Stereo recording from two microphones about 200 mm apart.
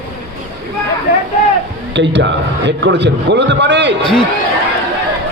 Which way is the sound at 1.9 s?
65° right (ahead or behind).